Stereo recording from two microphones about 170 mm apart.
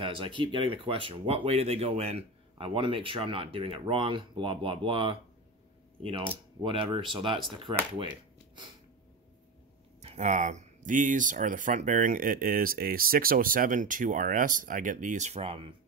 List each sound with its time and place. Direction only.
0.0 s speech: 30° right (ahead or behind)
10.0 s speech: 45° right (ahead or behind)